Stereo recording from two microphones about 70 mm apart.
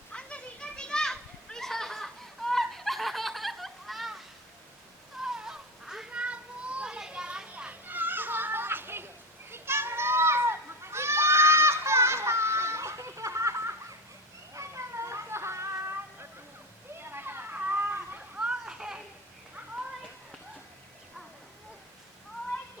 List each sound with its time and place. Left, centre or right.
0.1 s children playing: centre
5.2 s a sound: centre
6.1 s children playing: centre; by 9.0 s right
9.5 s goat: right
14.5 s cat: right
17.1 s a sound: right
18.3 s children playing: centre